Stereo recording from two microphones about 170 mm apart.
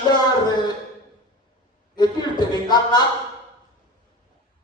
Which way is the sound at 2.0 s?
25° left (ahead or behind).